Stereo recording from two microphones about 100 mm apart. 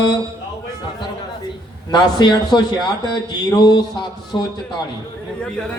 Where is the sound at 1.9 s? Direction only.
45° left (ahead or behind).